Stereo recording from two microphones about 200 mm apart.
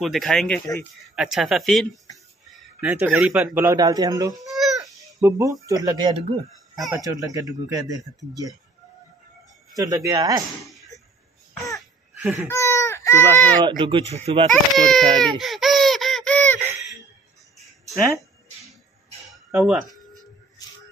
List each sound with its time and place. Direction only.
0.0 s speech: centre (ahead or behind); by 4.4 s 20° right (ahead or behind)
4.4 s babbling: centre (ahead or behind)
5.2 s speech: 15° right (ahead or behind)
6.7 s a sound: centre (ahead or behind)
7.0 s speech: 15° right (ahead or behind)
9.8 s speech: 20° right (ahead or behind)
10.6 s a sound: centre (ahead or behind)
12.2 s laughter: 10° right (ahead or behind)
12.4 s baby cry: 15° left (ahead or behind)
13.6 s speech: 20° right (ahead or behind)
14.5 s a sound: centre (ahead or behind)
16.5 s a sound: 10° right (ahead or behind)
17.6 s music: centre (ahead or behind)
19.3 s music: 5° right (ahead or behind)